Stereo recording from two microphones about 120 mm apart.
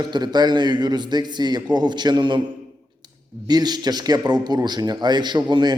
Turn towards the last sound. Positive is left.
turn(degrees=-35)  # may be behind; listen again after turning